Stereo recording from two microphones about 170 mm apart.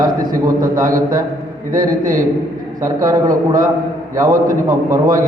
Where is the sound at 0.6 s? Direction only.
50° right (ahead or behind).